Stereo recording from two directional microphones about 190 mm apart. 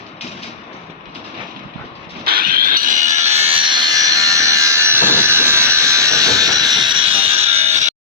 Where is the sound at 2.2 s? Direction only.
50° right (ahead or behind).